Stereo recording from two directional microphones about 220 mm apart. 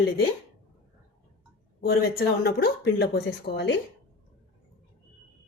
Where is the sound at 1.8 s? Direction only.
45° left (ahead or behind).